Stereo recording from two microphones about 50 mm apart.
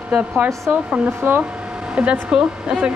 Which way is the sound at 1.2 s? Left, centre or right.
Right.